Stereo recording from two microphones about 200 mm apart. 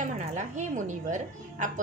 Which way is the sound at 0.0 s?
35° right (ahead or behind).